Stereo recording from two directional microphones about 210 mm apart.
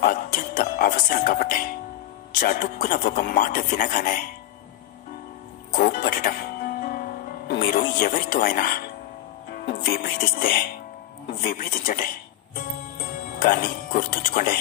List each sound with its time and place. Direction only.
0.0 s music: 40° left (ahead or behind)
2.3 s speech: 40° left (ahead or behind)
5.7 s speech: 40° left (ahead or behind)
12.5 s music: 40° left (ahead or behind)